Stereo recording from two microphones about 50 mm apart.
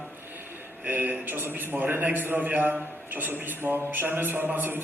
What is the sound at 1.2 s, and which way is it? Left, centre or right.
A man's voice, right.